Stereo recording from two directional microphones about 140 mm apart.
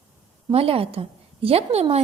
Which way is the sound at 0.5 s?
40° right (ahead or behind).